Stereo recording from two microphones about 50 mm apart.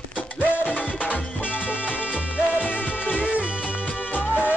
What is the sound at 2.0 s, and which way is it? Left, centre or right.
Music, right.